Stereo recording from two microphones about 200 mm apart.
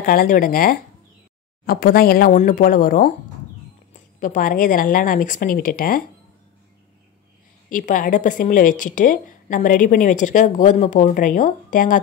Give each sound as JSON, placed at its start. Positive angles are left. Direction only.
{"t": 0.0, "sound": "a woman's voice", "side_deg": 45}
{"t": 7.7, "sound": "a woman's voice", "side_deg": 40}